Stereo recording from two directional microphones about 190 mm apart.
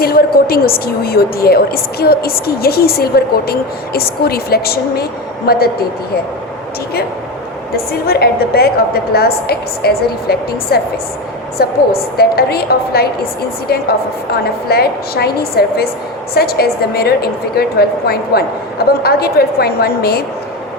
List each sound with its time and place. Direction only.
0.0 s a woman's voice: 50° left (ahead or behind)
8.0 s a woman's voice: 55° left (ahead or behind)
14.7 s a woman's voice: 55° left (ahead or behind)